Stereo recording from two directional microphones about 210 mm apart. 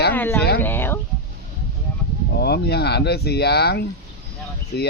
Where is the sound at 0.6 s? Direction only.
10° left (ahead or behind).